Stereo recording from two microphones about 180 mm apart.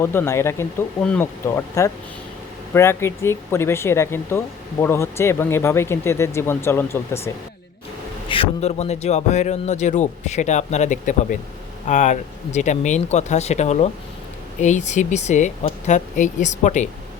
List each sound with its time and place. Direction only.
0.0 s speech: 10° left (ahead or behind)
8.3 s speech: 35° left (ahead or behind)